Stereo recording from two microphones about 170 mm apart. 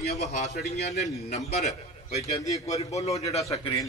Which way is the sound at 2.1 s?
40° left (ahead or behind).